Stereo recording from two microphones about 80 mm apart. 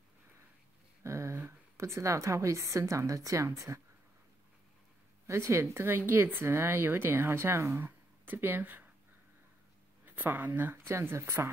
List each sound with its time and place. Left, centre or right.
1.0 s a sound: right
1.4 s a woman's voice: right
5.2 s speech: right
10.0 s speech: right